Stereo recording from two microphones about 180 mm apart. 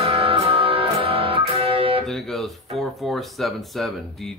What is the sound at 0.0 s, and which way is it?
Music, 30° right (ahead or behind).